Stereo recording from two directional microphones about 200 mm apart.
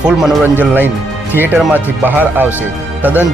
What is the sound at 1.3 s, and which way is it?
Speech, 10° right (ahead or behind).